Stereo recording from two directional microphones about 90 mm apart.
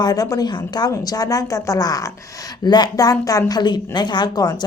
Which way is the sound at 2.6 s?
55° left (ahead or behind).